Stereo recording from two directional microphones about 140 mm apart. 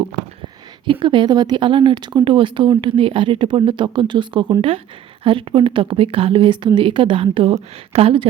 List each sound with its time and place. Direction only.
0.9 s a woman's voice: 35° right (ahead or behind)